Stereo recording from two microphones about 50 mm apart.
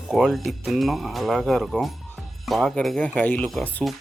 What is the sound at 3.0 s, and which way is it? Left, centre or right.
Speech, left.